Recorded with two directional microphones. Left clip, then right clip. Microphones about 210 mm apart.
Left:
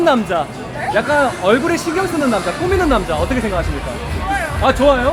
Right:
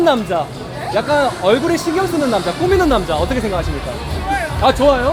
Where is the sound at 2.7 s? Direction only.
25° right (ahead or behind).